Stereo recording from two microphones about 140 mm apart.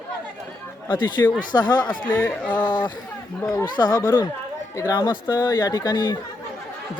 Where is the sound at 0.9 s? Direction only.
35° left (ahead or behind).